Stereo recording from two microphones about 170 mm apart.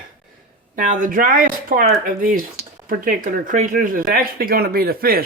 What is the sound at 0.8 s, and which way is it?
Speech, 50° right (ahead or behind).